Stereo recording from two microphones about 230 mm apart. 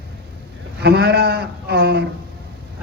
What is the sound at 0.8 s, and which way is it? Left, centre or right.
A man's voice, right.